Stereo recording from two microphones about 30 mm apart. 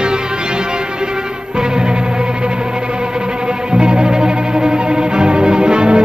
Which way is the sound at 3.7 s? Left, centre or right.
Right.